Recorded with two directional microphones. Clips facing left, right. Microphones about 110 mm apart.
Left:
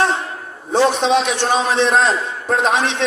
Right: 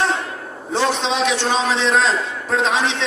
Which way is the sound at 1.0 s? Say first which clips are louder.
Left 3 dB; 50° left (ahead or behind).